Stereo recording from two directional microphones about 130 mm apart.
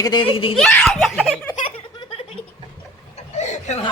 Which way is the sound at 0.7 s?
5° left (ahead or behind).